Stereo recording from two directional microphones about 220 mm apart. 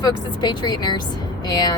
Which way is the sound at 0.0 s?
20° left (ahead or behind).